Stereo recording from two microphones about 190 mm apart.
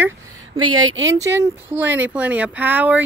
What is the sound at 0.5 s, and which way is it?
Speech, 90° right.